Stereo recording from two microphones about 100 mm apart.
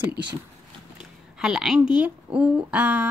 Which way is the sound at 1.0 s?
5° right (ahead or behind).